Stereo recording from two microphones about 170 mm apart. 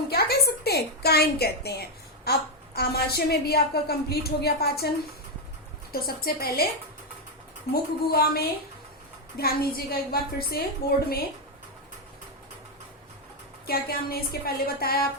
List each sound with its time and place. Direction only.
0.1 s a woman's voice: 65° left (ahead or behind)
5.9 s a woman's voice: 60° left (ahead or behind)
7.7 s a woman's voice: 65° left (ahead or behind)
13.7 s a woman's voice: 65° left (ahead or behind)